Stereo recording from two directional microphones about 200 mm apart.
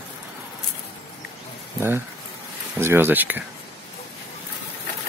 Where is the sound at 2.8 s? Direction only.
10° right (ahead or behind).